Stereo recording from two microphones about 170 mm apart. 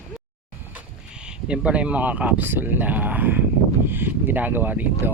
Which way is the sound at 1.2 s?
5° right (ahead or behind).